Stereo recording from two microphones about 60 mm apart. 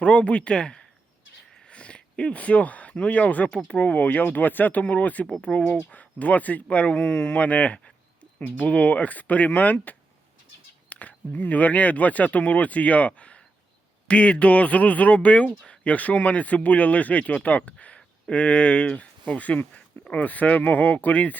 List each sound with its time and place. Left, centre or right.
0.0 s speech: centre
10.8 s speech: left